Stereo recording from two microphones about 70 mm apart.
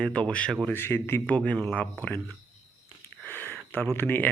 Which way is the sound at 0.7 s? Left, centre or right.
Left.